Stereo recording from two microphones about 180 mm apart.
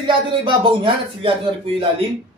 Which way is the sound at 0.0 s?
25° right (ahead or behind).